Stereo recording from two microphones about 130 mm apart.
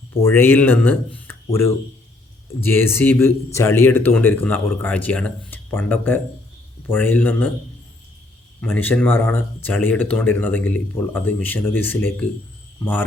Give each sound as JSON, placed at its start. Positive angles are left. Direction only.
{"t": 0.1, "sound": "speech", "side_deg": 20}
{"t": 8.6, "sound": "speech", "side_deg": 15}